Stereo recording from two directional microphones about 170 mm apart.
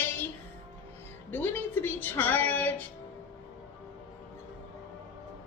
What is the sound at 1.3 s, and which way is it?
Music, 10° left (ahead or behind).